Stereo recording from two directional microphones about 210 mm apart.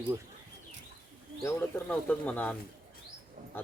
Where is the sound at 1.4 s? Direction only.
10° left (ahead or behind).